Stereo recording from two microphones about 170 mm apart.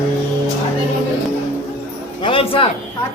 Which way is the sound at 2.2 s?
30° left (ahead or behind).